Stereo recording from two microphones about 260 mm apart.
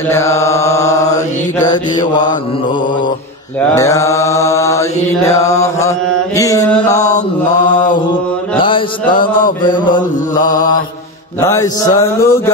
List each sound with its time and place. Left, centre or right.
0.1 s mantra: centre
3.7 s mantra: centre
7.4 s mantra: left
8.5 s mantra: centre
11.4 s mantra: centre